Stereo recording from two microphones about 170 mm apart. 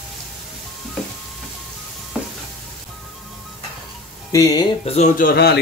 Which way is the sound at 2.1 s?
5° right (ahead or behind).